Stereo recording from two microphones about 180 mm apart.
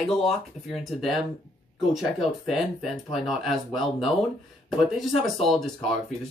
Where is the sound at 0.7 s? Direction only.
Centre (ahead or behind).